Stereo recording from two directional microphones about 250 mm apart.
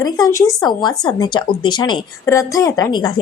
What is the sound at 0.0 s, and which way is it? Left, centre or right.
A woman's voice, centre.